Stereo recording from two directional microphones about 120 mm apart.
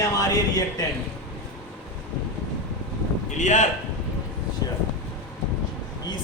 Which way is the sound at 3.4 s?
90° left.